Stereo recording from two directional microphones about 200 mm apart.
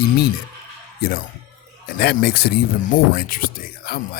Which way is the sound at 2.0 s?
50° left (ahead or behind).